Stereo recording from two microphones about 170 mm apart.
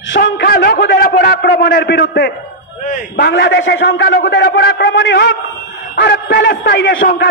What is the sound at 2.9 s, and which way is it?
A man's voice, 75° left (ahead or behind).